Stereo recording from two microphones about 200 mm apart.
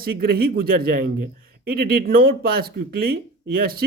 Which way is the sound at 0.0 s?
50° right (ahead or behind).